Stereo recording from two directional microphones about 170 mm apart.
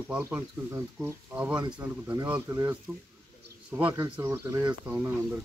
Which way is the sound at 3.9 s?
15° right (ahead or behind).